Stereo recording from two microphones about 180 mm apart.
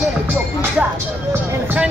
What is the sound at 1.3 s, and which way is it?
Speech, 10° right (ahead or behind).